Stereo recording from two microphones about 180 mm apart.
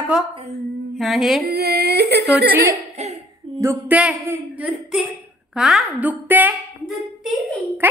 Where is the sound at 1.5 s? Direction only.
65° right (ahead or behind).